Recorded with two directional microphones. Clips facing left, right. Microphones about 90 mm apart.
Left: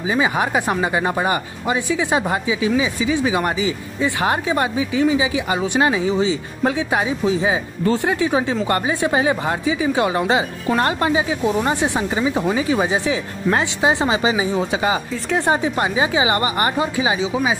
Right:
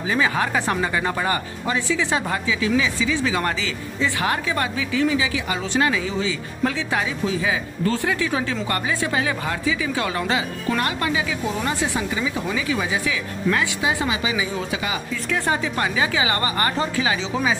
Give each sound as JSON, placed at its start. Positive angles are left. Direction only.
{"t": 0.1, "sound": "speech", "side_deg": 20}
{"t": 10.8, "sound": "speech", "side_deg": 30}